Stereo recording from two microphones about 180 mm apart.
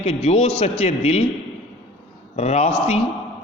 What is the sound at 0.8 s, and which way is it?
Speech, 35° left (ahead or behind).